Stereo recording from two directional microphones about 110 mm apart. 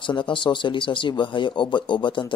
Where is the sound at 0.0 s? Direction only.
45° left (ahead or behind).